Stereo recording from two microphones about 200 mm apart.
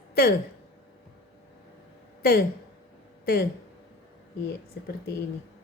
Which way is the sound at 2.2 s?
50° left (ahead or behind).